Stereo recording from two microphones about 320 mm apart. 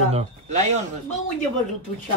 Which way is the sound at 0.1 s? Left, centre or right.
Right.